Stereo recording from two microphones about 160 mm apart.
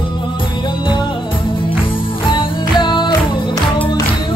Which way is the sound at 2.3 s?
30° left (ahead or behind).